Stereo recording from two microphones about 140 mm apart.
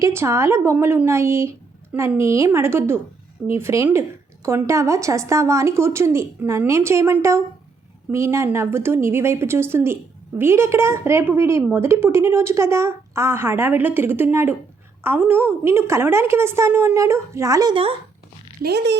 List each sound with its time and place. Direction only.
0.0 s a woman's voice: 20° right (ahead or behind)